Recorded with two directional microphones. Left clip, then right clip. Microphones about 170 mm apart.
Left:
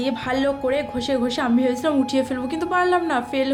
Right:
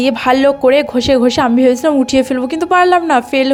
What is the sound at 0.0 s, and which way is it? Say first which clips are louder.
A woman's voice: right 11 dB; 50° right (ahead or behind).